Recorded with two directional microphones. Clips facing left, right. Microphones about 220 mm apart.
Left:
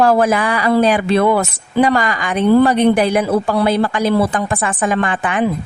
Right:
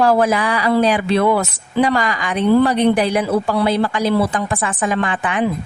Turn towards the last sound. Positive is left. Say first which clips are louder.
# left 2 dB
turn(degrees=50)  # may be behind; listen again after turning